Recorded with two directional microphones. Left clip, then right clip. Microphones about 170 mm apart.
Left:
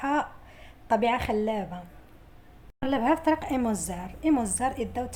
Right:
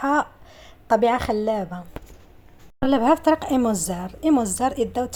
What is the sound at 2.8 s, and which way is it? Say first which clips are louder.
A woman's voice: right 7 dB; 45° right (ahead or behind).